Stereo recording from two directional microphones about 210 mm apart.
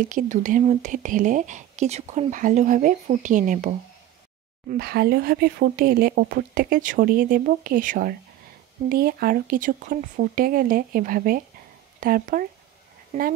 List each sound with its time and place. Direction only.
0.0 s speech: 40° right (ahead or behind)
4.6 s speech: 50° right (ahead or behind)